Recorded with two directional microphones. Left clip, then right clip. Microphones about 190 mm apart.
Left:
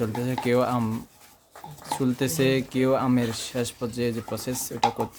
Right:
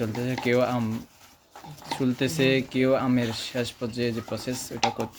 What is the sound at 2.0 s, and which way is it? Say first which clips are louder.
Speech: even; 15° left (ahead or behind).